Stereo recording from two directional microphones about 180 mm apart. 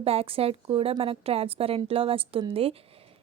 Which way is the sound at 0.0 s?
35° right (ahead or behind).